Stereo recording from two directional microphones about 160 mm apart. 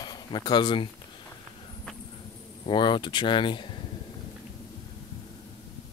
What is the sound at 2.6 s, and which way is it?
Speech, 30° left (ahead or behind).